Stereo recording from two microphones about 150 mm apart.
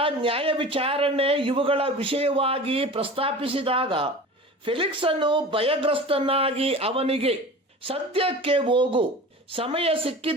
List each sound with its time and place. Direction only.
0.0 s a man's voice: 35° right (ahead or behind)